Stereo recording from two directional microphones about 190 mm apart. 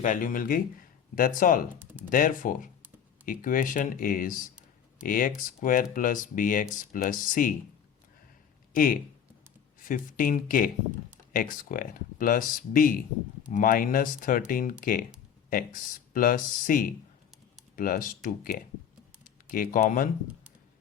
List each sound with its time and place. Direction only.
0.0 s speech: 45° left (ahead or behind)
1.7 s a sound: 10° right (ahead or behind)
2.0 s speech: 45° left (ahead or behind)
8.7 s speech: 45° left (ahead or behind)